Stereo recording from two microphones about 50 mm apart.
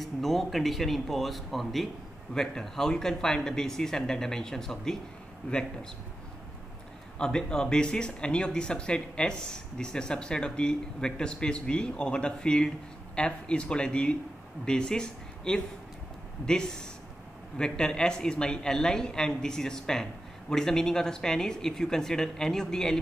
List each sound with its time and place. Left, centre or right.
0.0 s speech: centre
7.2 s speech: centre